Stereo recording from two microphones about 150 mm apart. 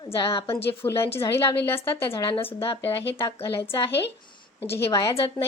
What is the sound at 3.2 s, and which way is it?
A woman's voice, 15° left (ahead or behind).